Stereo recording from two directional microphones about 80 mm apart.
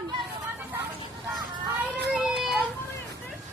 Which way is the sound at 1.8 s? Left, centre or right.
Centre.